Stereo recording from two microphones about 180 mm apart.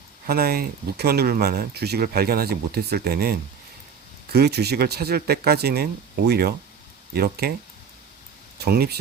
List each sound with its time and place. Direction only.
0.3 s speech: 60° right (ahead or behind)
8.5 s speech: 60° right (ahead or behind)